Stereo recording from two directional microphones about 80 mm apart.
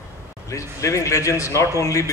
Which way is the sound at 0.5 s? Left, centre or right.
Left.